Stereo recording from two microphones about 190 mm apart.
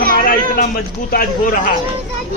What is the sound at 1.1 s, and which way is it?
Speech, 50° left (ahead or behind).